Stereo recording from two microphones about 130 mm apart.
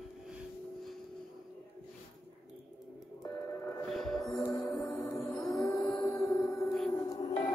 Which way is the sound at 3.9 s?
Centre (ahead or behind).